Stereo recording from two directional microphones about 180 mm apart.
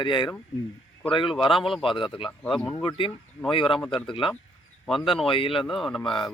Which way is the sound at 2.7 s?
25° left (ahead or behind).